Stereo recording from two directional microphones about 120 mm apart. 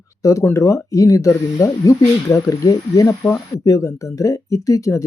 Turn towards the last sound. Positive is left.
turn(degrees=25)  # may be behind; listen again after turning